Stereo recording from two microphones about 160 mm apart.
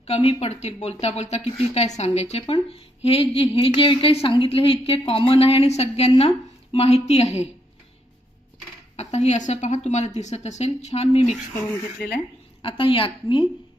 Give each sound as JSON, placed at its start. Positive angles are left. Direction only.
{"t": 0.1, "sound": "a woman's voice", "side_deg": 40}
{"t": 9.0, "sound": "a woman's voice", "side_deg": 45}
{"t": 12.0, "sound": "speech", "side_deg": 15}
{"t": 12.6, "sound": "a woman's voice", "side_deg": 35}